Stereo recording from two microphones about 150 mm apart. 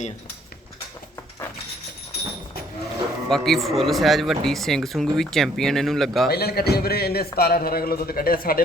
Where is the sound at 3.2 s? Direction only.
Centre (ahead or behind).